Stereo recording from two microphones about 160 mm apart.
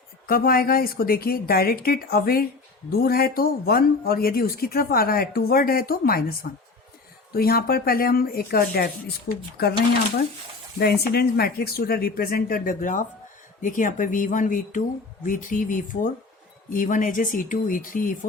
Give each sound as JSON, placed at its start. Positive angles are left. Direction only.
{"t": 0.3, "sound": "speech", "side_deg": 65}
{"t": 7.3, "sound": "speech", "side_deg": 70}
{"t": 9.3, "sound": "speech", "side_deg": 90}
{"t": 10.8, "sound": "speech", "side_deg": 85}